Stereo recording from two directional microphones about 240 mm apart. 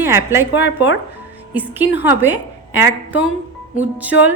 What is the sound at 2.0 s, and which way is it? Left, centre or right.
A woman's voice, centre.